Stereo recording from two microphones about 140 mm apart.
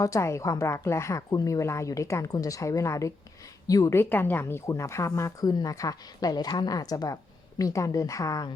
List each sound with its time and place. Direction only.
0.0 s a woman's voice: 20° left (ahead or behind)